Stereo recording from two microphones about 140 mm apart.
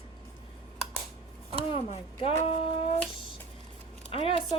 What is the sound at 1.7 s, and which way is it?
Speech, 45° left (ahead or behind).